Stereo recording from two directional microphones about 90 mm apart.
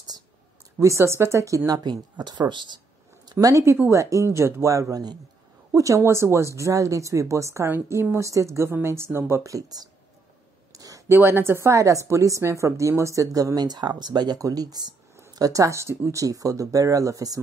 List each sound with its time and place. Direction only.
0.7 s speech: 35° right (ahead or behind)
1.7 s speech: 50° right (ahead or behind)
3.3 s speech: 45° right (ahead or behind)
10.7 s a sound: 40° right (ahead or behind)
11.1 s speech: 25° right (ahead or behind); by 17.4 s 40° right (ahead or behind)